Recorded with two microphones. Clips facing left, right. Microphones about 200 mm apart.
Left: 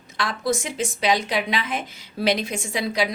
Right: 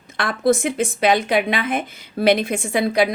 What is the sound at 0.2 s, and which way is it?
A woman's voice, 55° right (ahead or behind).